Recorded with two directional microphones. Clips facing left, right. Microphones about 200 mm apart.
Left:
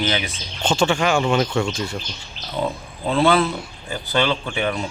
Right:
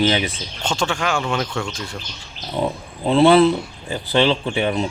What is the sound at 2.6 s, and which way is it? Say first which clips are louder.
Speech: right 2 dB; 20° right (ahead or behind).